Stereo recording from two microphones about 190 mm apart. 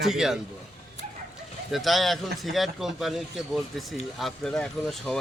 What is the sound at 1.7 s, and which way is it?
A man's voice, centre (ahead or behind).